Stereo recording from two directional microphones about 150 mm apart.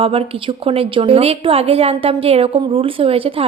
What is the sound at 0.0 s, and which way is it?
A woman's voice, 40° right (ahead or behind).